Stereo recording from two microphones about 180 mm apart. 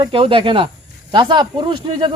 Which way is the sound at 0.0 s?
30° right (ahead or behind).